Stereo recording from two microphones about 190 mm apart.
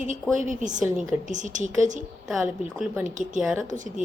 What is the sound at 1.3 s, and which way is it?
Speech, 40° right (ahead or behind).